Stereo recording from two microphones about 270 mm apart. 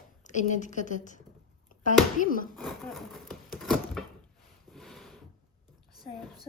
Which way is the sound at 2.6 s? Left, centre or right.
Centre.